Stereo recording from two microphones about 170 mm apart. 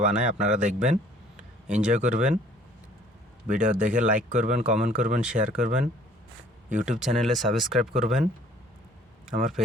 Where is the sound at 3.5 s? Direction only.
45° right (ahead or behind).